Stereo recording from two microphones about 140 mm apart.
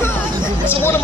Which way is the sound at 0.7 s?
15° left (ahead or behind).